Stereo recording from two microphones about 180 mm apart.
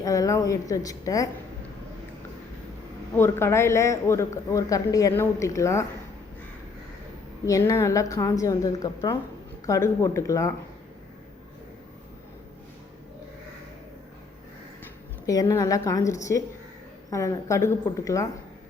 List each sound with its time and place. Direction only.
0.0 s a woman's voice: 20° left (ahead or behind)
3.2 s a man's voice: 15° left (ahead or behind)
7.4 s a woman's voice: 20° left (ahead or behind)
15.3 s a woman's voice: 20° left (ahead or behind)